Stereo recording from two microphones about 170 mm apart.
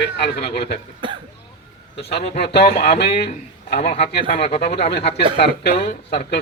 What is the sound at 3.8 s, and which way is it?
Speech, 40° left (ahead or behind).